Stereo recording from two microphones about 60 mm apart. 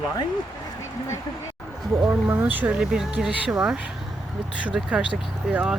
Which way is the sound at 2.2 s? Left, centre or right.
Right.